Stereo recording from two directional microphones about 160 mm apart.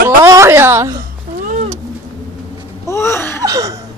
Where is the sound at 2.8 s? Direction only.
15° left (ahead or behind).